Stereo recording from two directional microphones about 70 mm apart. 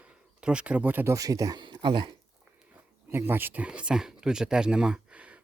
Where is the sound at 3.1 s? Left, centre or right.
Right.